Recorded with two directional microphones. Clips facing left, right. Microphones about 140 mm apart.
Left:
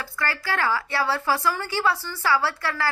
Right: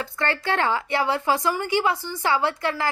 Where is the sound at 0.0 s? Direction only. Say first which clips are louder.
Right 4 dB; 25° right (ahead or behind).